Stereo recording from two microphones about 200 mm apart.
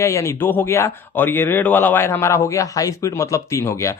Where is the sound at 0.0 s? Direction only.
15° left (ahead or behind).